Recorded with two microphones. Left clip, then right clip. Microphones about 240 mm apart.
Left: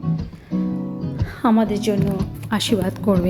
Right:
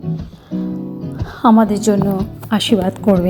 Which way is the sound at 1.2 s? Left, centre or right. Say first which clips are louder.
Right 7 dB; centre.